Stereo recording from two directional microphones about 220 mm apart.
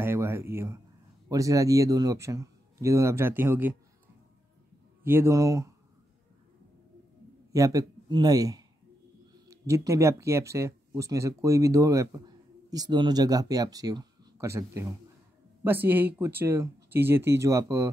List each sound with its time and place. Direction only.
0.0 s a sound: 10° right (ahead or behind)
1.3 s speech: 15° right (ahead or behind)
5.0 s speech: 10° right (ahead or behind)
7.5 s speech: 15° right (ahead or behind)